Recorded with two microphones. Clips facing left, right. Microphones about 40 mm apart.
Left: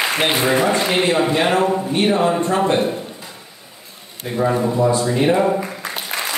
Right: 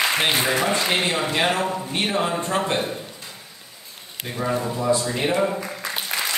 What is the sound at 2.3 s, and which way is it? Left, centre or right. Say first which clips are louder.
Speech: left 6 dB; centre.